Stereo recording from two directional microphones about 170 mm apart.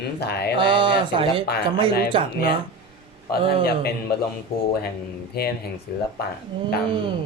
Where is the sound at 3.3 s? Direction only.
65° left (ahead or behind).